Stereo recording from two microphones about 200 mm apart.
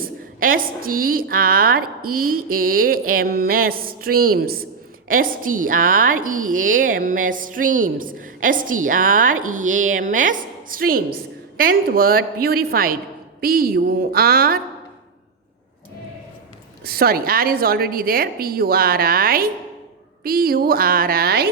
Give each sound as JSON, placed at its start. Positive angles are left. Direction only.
{"t": 0.0, "sound": "a woman's voice", "side_deg": -45}
{"t": 16.8, "sound": "a woman's voice", "side_deg": -50}